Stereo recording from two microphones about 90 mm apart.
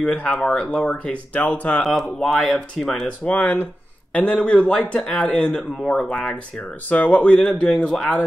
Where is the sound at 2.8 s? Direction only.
5° left (ahead or behind).